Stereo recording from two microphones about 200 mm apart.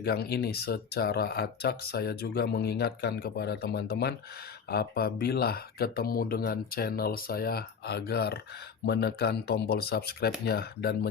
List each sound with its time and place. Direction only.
0.0 s speech: 50° left (ahead or behind)